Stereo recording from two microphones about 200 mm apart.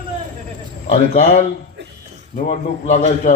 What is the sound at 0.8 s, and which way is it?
A man's voice, 35° left (ahead or behind).